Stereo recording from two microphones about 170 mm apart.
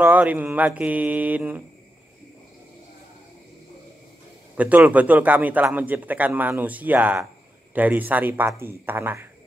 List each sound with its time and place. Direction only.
0.0 s a man's voice: 10° right (ahead or behind)
4.6 s a man's voice: 10° right (ahead or behind)